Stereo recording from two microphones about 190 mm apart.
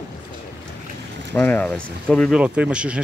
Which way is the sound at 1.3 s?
10° left (ahead or behind).